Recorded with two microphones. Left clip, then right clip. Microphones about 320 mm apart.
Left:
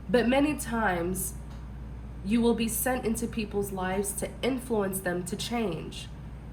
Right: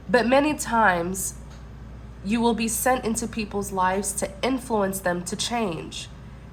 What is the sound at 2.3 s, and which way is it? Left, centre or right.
A woman's voice, centre.